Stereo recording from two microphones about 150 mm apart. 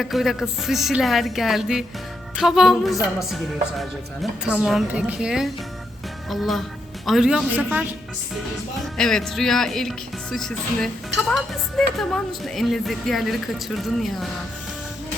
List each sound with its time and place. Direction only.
0.0 s speech: centre (ahead or behind)
9.0 s speech: 5° left (ahead or behind)